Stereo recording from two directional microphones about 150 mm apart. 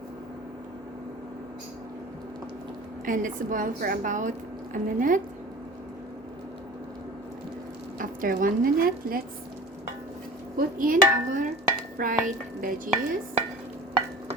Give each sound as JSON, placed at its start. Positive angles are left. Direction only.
{"t": 3.1, "sound": "a woman's voice", "side_deg": -60}
{"t": 7.9, "sound": "speech", "side_deg": -65}
{"t": 10.6, "sound": "a woman's voice", "side_deg": -65}